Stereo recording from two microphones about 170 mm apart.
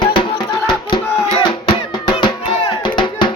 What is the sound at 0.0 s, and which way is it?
Music, 25° left (ahead or behind).